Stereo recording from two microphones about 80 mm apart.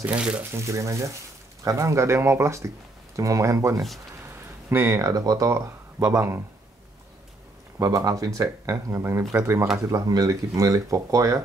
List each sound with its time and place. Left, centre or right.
0.0 s speech: centre
0.5 s speech: right
5.0 s speech: right
7.8 s speech: right
9.8 s speech: right